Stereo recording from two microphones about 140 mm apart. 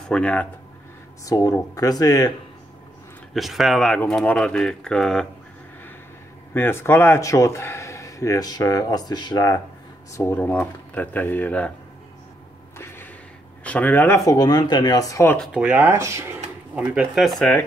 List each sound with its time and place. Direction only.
0.1 s speech: 10° left (ahead or behind)
1.2 s speech: 25° left (ahead or behind)
3.3 s speech: centre (ahead or behind)
6.5 s speech: 15° left (ahead or behind)
10.1 s speech: 15° left (ahead or behind)
12.7 s a sound: 15° left (ahead or behind)
13.7 s speech: 10° left (ahead or behind)
15.5 s speech: 10° right (ahead or behind)
16.7 s speech: 10° right (ahead or behind)